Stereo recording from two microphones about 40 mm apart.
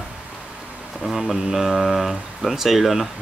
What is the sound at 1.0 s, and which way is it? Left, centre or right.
Speech, centre.